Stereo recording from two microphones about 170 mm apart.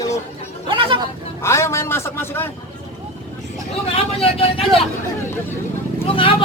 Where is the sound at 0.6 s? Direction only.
30° right (ahead or behind).